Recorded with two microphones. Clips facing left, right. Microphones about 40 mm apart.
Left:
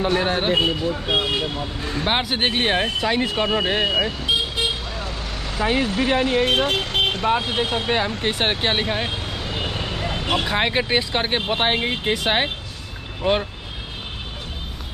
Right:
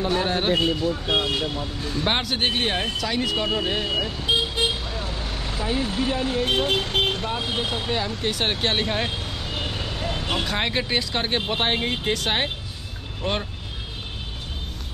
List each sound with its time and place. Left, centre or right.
0.0 s speech: left
1.8 s speech: left
2.0 s speech: centre; by 4.1 s left
5.6 s speech: left
7.2 s speech: left
8.5 s vehicle: centre
9.8 s speech: left